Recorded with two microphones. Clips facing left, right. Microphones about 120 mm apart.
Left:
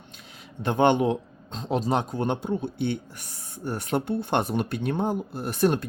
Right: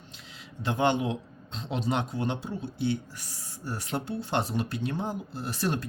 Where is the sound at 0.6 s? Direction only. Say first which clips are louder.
Left 5 dB; 55° left (ahead or behind).